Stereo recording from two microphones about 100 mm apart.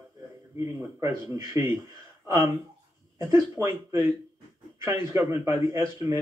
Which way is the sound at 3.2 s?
25° right (ahead or behind).